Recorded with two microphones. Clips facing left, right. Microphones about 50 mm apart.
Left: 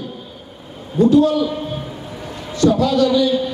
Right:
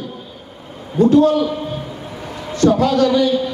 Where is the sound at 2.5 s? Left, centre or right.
Right.